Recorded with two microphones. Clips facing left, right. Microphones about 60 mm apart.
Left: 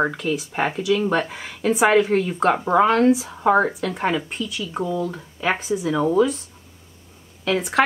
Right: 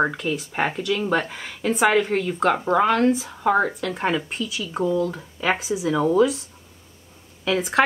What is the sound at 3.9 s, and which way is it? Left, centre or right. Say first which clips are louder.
Speech: left 1 dB; centre.